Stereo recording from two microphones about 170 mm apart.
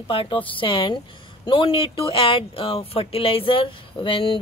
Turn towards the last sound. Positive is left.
turn(degrees=30)  # may be behind; listen again after turning